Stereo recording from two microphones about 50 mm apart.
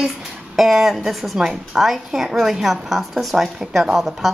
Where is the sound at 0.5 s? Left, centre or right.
Centre.